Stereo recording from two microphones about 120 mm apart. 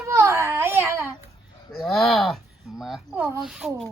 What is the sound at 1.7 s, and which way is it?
Speech, centre (ahead or behind).